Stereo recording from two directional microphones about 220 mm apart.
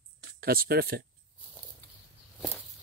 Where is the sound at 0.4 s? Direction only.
40° right (ahead or behind).